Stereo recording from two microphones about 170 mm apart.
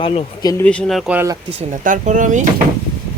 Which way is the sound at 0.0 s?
35° left (ahead or behind).